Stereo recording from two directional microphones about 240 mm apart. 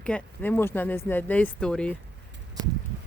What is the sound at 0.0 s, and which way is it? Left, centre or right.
Speech, centre.